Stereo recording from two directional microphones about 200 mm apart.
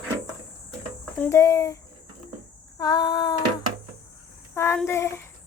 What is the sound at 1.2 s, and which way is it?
A woman's voice, 15° left (ahead or behind).